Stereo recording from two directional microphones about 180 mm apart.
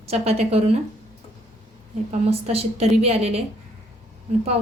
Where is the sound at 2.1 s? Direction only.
35° right (ahead or behind).